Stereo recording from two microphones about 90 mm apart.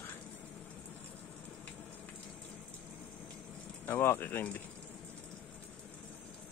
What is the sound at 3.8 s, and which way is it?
Speech, 25° left (ahead or behind).